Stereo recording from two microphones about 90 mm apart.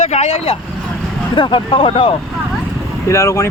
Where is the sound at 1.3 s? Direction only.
65° left (ahead or behind); by 2.1 s 85° left.